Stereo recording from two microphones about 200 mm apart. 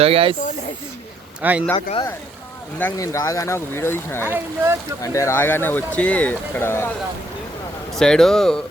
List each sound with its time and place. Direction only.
0.0 s speech: 30° right (ahead or behind)
1.4 s speech: 5° right (ahead or behind)
2.7 s speech: 10° left (ahead or behind)
4.3 s speech: 15° right (ahead or behind)
5.0 s speech: 15° left (ahead or behind)
7.9 s speech: 5° left (ahead or behind)